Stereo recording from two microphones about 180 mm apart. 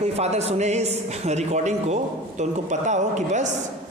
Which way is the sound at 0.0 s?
35° right (ahead or behind).